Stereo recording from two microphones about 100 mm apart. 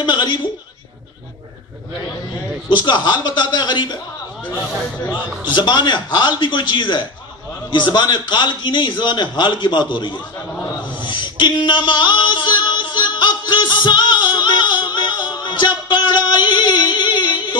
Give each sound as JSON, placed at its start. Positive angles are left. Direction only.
{"t": 0.0, "sound": "a man's voice", "side_deg": 50}
{"t": 2.7, "sound": "a man's voice", "side_deg": 50}
{"t": 5.5, "sound": "a man's voice", "side_deg": 50}
{"t": 11.0, "sound": "a sound", "side_deg": 50}